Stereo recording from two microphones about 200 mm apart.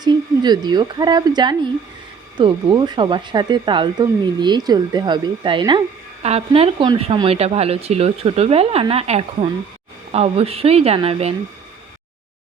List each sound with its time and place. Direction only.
0.0 s a woman's voice: 20° right (ahead or behind)